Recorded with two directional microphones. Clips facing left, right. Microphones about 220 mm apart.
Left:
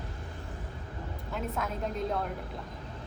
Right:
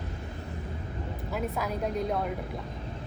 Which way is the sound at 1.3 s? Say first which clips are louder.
Right 3 dB; centre (ahead or behind).